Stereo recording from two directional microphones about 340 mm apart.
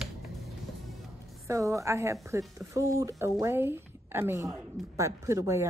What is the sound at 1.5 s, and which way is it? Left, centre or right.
Speech, centre.